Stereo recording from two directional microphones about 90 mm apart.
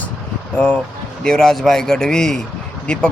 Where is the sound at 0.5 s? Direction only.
15° left (ahead or behind).